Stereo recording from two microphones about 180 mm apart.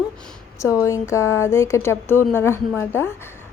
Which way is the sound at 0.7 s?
15° left (ahead or behind).